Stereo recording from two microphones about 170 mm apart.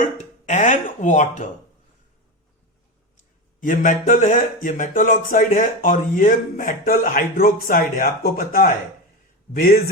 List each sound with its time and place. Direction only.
0.2 s speech: 45° left (ahead or behind)
3.6 s speech: 50° left (ahead or behind)